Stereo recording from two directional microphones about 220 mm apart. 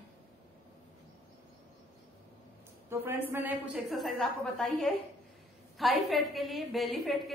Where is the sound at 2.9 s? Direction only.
10° right (ahead or behind).